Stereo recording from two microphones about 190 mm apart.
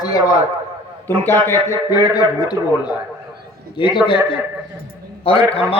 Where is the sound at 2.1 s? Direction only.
20° left (ahead or behind).